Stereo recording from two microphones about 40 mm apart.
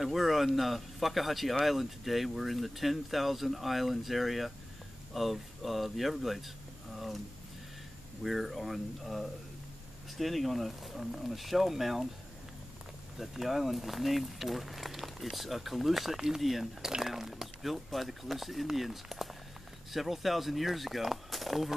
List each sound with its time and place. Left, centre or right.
0.0 s speech: centre
8.2 s speech: centre
13.2 s speech: centre